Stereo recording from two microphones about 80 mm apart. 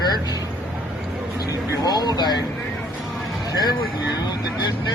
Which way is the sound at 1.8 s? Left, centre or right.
Left.